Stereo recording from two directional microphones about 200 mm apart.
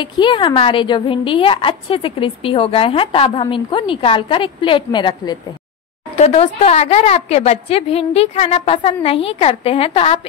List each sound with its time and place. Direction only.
0.0 s a woman's voice: 25° left (ahead or behind)
6.1 s a woman's voice: 30° left (ahead or behind)